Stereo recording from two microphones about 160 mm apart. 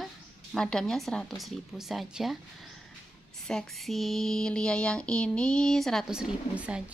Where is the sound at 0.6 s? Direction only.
5° left (ahead or behind).